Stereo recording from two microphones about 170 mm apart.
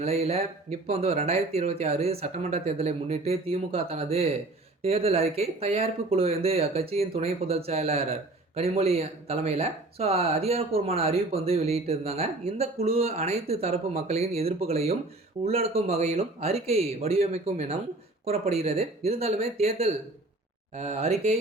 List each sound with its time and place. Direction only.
0.0 s speech: 35° right (ahead or behind)